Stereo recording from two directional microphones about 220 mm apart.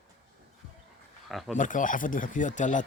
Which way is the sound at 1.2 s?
Centre (ahead or behind).